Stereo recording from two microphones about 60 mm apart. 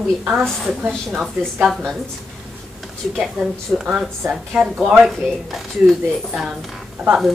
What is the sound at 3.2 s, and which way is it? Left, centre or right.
Speech, centre.